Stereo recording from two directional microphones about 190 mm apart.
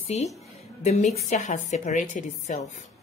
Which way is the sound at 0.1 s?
35° left (ahead or behind).